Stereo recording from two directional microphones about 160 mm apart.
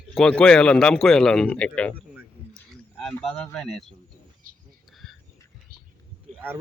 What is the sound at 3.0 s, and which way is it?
Speech, 5° left (ahead or behind).